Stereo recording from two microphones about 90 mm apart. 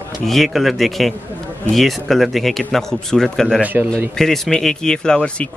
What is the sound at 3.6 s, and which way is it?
Speech, 20° right (ahead or behind).